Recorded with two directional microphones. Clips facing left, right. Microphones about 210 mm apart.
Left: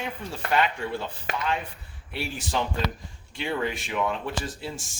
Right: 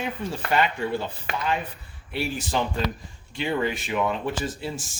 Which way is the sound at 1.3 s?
40° left (ahead or behind).